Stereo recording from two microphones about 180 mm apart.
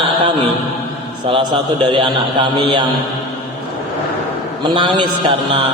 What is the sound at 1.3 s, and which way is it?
A man's voice, 25° right (ahead or behind).